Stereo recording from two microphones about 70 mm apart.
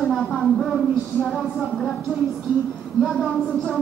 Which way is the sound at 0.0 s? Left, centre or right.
Centre.